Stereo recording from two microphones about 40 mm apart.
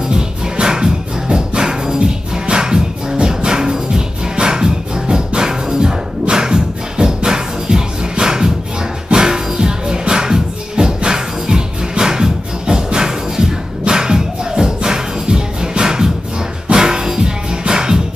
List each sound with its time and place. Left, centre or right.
0.1 s music: centre